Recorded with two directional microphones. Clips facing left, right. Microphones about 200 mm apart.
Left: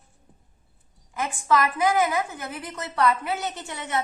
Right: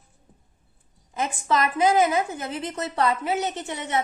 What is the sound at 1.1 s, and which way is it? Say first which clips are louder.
A woman's voice: left 1 dB; 20° right (ahead or behind).